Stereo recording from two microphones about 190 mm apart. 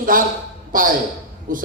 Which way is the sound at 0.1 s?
45° right (ahead or behind).